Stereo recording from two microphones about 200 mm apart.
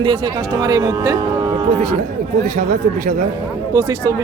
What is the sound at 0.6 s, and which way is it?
Speech, 20° right (ahead or behind).